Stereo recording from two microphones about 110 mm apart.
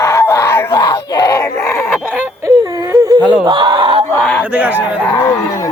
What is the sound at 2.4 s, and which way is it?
Whimper, 30° right (ahead or behind).